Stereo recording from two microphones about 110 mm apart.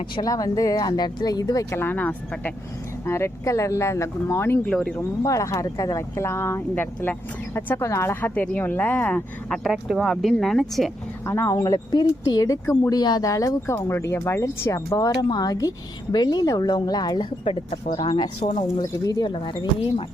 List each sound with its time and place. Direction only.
0.2 s speech: 35° left (ahead or behind)
1.7 s speech: 20° left (ahead or behind)
4.7 s speech: 5° left (ahead or behind)
4.9 s speech: 30° left (ahead or behind)
9.5 s speech: centre (ahead or behind)
11.3 s speech: 25° left (ahead or behind); by 17.7 s 60° left (ahead or behind)
18.0 s speech: 45° left (ahead or behind)
18.8 s speech: 35° left (ahead or behind)
19.3 s speech: 45° left (ahead or behind)